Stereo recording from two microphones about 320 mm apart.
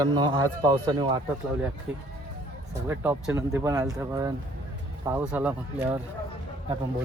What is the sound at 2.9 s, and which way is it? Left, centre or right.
A man's voice, centre.